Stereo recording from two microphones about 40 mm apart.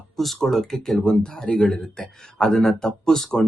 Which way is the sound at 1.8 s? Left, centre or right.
Centre.